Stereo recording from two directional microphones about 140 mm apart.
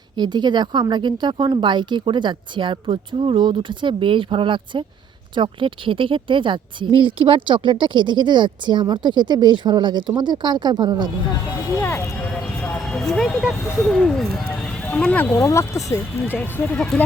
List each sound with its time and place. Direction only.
0.2 s speech: 30° right (ahead or behind)
11.8 s speech: 15° left (ahead or behind)